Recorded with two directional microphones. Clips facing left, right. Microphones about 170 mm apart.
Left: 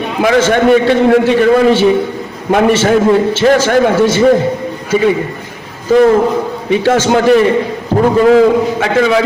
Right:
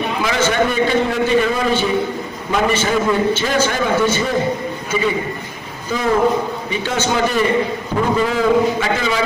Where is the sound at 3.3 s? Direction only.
75° left (ahead or behind).